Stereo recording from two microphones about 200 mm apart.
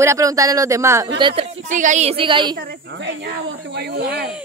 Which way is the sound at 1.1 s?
25° right (ahead or behind).